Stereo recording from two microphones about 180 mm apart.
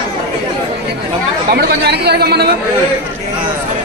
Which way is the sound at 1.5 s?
65° right (ahead or behind).